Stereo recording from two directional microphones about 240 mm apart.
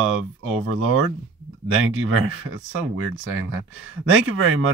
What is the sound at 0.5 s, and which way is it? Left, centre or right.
Speech, right.